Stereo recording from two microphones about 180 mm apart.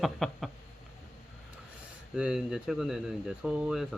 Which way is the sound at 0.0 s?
Centre (ahead or behind).